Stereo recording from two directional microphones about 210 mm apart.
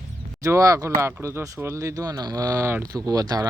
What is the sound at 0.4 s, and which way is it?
Speech, 15° right (ahead or behind).